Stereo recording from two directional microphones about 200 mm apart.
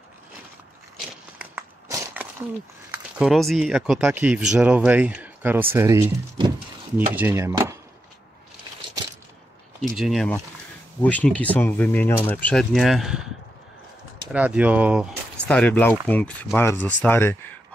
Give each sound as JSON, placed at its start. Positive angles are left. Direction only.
{"t": 1.4, "sound": "walk", "side_deg": -10}
{"t": 3.2, "sound": "speech", "side_deg": 0}
{"t": 7.2, "sound": "speech", "side_deg": -10}
{"t": 9.8, "sound": "speech", "side_deg": 0}
{"t": 14.3, "sound": "speech", "side_deg": -5}
{"t": 15.4, "sound": "speech", "side_deg": 5}